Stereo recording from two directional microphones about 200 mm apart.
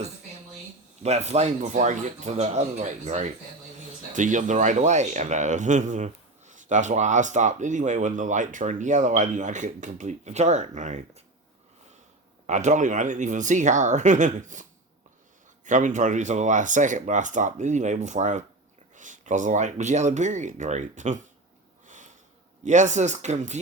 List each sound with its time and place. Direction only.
1.0 s speech: 35° right (ahead or behind)
12.5 s speech: 35° right (ahead or behind)
21.8 s sniff: 40° right (ahead or behind)
22.6 s speech: 35° right (ahead or behind)